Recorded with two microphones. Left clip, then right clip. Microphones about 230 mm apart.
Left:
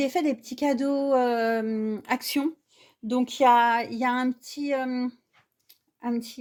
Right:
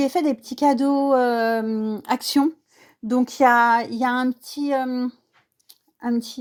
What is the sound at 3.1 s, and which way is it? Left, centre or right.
Speech, right.